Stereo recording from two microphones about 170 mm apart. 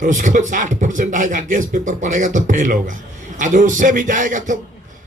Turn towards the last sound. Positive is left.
turn(degrees=-50)  # may be behind; listen again after turning